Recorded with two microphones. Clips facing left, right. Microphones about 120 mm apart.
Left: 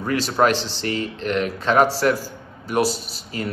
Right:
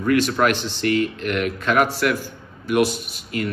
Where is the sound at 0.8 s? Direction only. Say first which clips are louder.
Right 5 dB; 30° left (ahead or behind).